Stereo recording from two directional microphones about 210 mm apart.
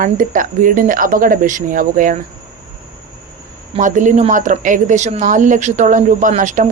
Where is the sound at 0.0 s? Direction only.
40° right (ahead or behind).